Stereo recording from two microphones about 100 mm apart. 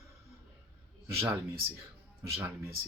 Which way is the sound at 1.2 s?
25° right (ahead or behind).